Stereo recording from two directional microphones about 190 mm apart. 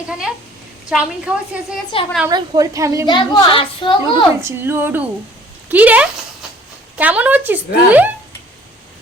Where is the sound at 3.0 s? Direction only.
20° left (ahead or behind).